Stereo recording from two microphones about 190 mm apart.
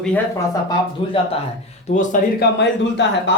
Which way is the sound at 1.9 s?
40° left (ahead or behind).